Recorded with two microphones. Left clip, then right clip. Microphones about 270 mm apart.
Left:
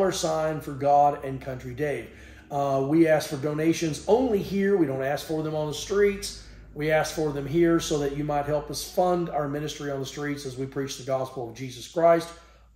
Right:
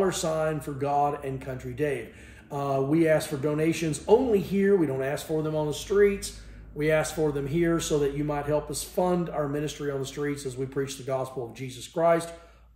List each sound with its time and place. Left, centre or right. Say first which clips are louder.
0.0 s speech: left 1 dB; centre